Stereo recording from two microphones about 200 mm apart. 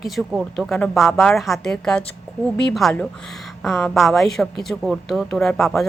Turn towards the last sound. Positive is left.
turn(degrees=0)  # may be behind; listen again after turning